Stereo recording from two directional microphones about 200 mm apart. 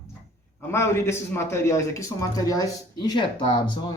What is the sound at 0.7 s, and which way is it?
A man's voice, 15° left (ahead or behind).